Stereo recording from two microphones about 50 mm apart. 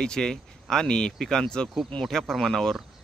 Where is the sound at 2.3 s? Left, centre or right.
Centre.